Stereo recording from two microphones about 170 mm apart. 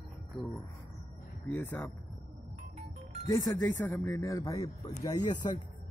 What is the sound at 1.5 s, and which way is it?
Speech, 10° left (ahead or behind).